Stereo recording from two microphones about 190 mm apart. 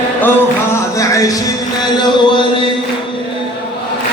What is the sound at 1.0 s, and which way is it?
Music, 20° left (ahead or behind).